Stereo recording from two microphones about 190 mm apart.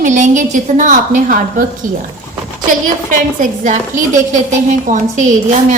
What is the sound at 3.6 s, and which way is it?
A woman's voice, 40° right (ahead or behind).